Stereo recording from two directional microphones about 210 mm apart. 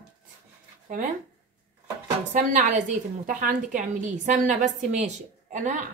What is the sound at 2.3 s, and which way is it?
A woman's voice, 35° right (ahead or behind).